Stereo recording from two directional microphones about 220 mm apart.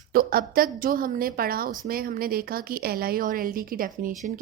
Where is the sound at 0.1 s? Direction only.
40° right (ahead or behind).